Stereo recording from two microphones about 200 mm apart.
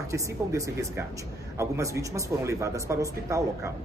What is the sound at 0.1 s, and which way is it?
Speech, 15° right (ahead or behind).